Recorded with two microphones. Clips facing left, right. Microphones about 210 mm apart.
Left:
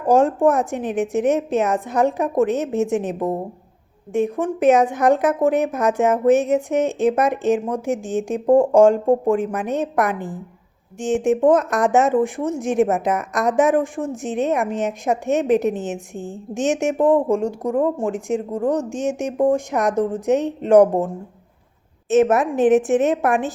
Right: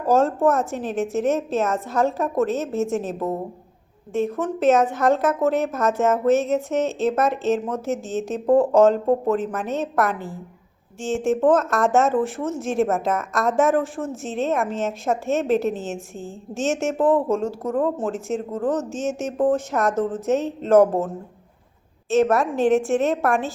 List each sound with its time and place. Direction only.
0.0 s speech: 15° left (ahead or behind)
22.1 s a woman's voice: 20° left (ahead or behind)